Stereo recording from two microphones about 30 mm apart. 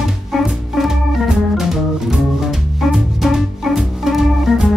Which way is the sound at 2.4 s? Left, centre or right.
Centre.